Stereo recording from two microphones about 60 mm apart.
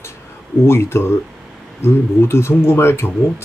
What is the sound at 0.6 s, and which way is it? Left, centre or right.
Speech, left.